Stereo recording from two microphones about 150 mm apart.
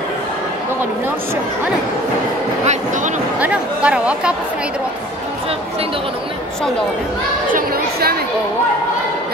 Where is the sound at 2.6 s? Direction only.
55° right (ahead or behind).